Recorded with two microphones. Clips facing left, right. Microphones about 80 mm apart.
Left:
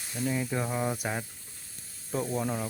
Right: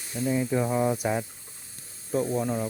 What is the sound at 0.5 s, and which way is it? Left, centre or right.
Speech, centre.